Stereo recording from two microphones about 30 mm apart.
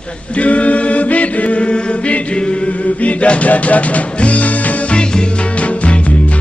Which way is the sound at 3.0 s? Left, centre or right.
Left.